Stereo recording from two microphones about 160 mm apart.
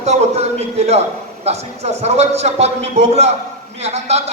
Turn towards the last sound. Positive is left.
turn(degrees=-40)  # may be behind; listen again after turning